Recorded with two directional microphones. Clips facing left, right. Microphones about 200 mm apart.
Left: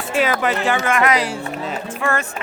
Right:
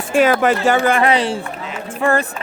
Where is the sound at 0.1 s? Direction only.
45° right (ahead or behind).